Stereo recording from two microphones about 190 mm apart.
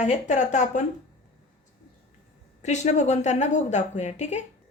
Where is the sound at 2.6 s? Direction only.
35° left (ahead or behind).